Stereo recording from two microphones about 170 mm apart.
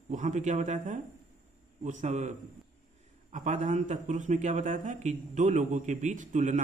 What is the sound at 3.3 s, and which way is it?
A man's voice, 45° right (ahead or behind).